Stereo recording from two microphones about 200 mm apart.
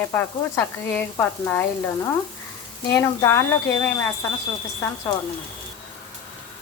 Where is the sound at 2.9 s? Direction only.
15° left (ahead or behind).